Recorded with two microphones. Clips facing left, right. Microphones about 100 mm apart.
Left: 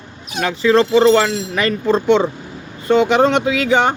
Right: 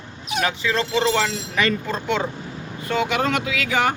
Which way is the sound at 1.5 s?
45° left (ahead or behind).